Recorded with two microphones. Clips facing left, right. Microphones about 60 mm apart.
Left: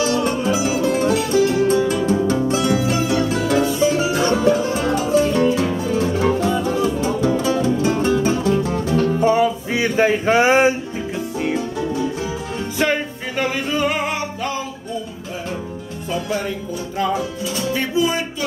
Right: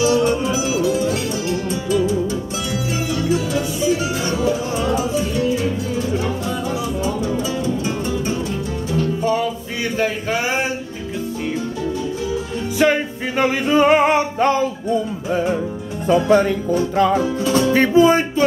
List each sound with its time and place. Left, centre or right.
0.2 s music: left
7.4 s music: left
9.2 s music: left
12.7 s music: centre
13.4 s music: right
17.5 s music: right